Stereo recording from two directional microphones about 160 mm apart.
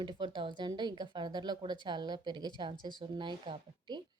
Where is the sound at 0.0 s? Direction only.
30° right (ahead or behind).